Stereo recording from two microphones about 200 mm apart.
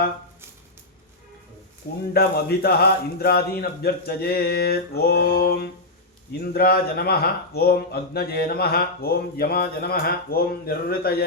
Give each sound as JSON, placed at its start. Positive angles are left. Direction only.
{"t": 2.1, "sound": "speech", "side_deg": 50}